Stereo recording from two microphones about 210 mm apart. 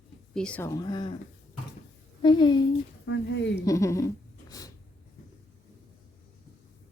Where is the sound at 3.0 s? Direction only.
65° left (ahead or behind).